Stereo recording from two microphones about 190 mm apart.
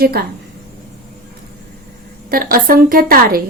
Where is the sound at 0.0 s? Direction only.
55° right (ahead or behind).